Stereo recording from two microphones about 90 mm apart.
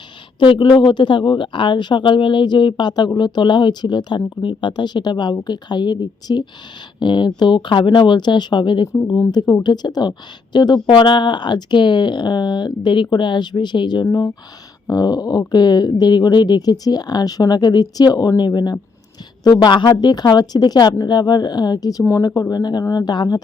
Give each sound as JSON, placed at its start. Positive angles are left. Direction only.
{"t": 0.3, "sound": "speech", "side_deg": 70}
{"t": 8.9, "sound": "speech", "side_deg": 35}
{"t": 9.3, "sound": "speech", "side_deg": 50}
{"t": 10.8, "sound": "speech", "side_deg": 65}
{"t": 14.1, "sound": "speech", "side_deg": 40}